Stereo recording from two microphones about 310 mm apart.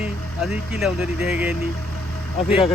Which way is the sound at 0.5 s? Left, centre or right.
Centre.